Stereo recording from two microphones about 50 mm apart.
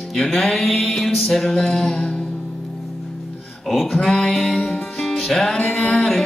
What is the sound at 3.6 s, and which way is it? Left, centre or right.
Speech, centre.